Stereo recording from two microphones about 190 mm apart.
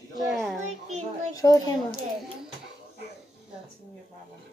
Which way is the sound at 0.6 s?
35° right (ahead or behind).